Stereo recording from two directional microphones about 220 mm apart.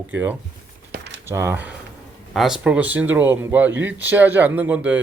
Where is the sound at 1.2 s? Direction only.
10° right (ahead or behind).